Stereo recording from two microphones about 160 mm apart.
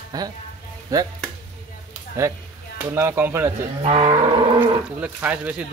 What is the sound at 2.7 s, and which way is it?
Speech, 15° right (ahead or behind).